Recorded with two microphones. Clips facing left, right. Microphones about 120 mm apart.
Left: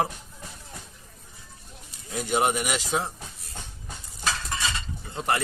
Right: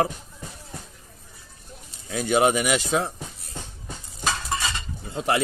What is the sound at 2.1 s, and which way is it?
A man's voice, 65° right (ahead or behind).